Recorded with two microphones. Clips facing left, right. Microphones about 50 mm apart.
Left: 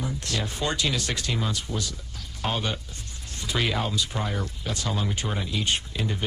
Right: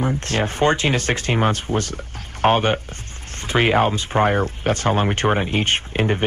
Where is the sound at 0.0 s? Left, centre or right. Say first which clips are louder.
Right 9 dB; right.